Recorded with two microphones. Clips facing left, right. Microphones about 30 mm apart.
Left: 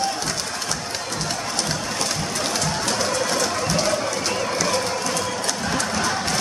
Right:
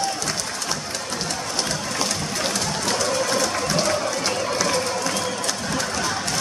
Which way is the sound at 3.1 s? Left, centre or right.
Centre.